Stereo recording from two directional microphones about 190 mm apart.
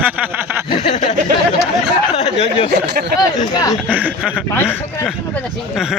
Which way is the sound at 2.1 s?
30° left (ahead or behind).